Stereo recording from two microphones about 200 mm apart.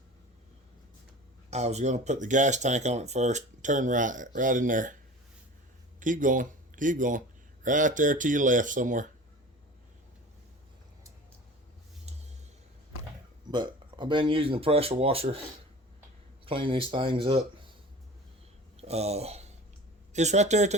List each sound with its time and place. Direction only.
1.5 s speech: 35° right (ahead or behind)
6.0 s speech: 40° right (ahead or behind)
13.5 s speech: 20° right (ahead or behind)
16.5 s speech: 25° right (ahead or behind)
18.8 s speech: 30° right (ahead or behind)